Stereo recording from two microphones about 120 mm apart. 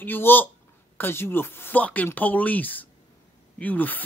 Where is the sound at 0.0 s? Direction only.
15° left (ahead or behind).